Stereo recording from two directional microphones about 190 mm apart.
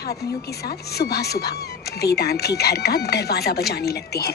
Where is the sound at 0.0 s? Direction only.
55° left (ahead or behind).